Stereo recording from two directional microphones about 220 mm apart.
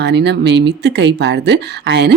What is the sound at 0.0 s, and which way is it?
Speech, 50° right (ahead or behind).